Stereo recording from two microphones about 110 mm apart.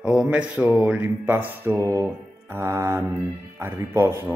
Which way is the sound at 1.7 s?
30° right (ahead or behind).